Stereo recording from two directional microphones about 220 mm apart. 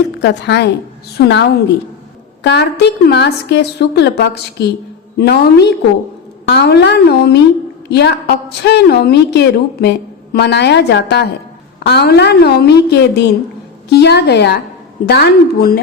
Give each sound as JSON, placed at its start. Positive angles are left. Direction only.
{"t": 0.2, "sound": "a woman's voice", "side_deg": 50}